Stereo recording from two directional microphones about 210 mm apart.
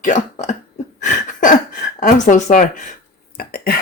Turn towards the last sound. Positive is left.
turn(degrees=45)  # may be behind; listen again after turning